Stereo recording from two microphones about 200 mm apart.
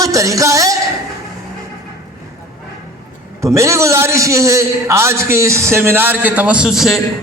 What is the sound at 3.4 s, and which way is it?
A man's voice, 15° right (ahead or behind).